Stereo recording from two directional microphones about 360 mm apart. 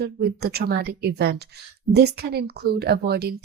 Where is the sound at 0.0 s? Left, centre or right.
Right.